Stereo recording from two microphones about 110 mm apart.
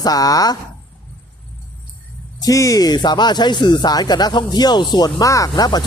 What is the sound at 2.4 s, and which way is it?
Speech, 30° left (ahead or behind).